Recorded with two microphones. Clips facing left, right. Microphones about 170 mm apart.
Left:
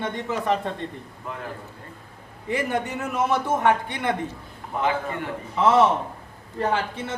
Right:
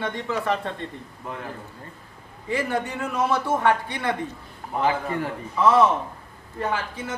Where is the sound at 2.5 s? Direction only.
20° left (ahead or behind).